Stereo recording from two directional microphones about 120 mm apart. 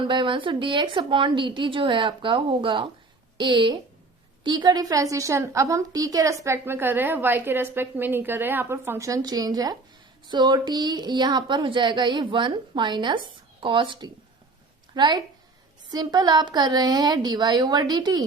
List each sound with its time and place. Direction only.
0.1 s a woman's voice: 45° right (ahead or behind)